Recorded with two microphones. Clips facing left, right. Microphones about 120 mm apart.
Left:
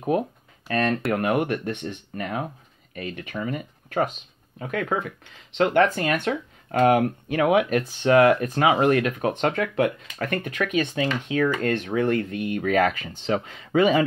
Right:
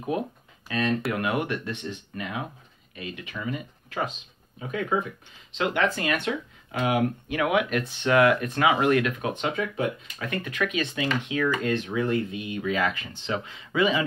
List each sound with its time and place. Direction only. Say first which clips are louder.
0.7 s speech: left 3 dB; 55° left (ahead or behind)
1.1 s speech: left 4 dB; 45° left (ahead or behind)
4.6 s speech: left 1 dB; 65° left (ahead or behind)
5.6 s speech: left 6 dB; 45° left (ahead or behind)
9.3 s speech: left 4 dB; 60° left (ahead or behind)
10.4 s speech: left 2 dB; 40° left (ahead or behind)
11.6 s speech: left 3 dB; 60° left (ahead or behind)